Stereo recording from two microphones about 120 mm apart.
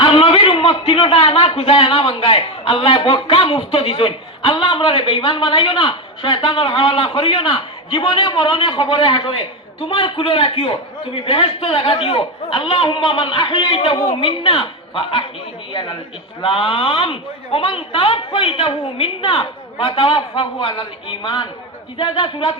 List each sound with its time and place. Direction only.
0.0 s a man's voice: 55° left (ahead or behind)
13.9 s a woman's voice: 30° left (ahead or behind)
14.2 s a man's voice: 50° left (ahead or behind)